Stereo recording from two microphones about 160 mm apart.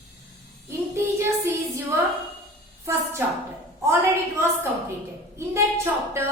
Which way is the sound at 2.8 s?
15° right (ahead or behind).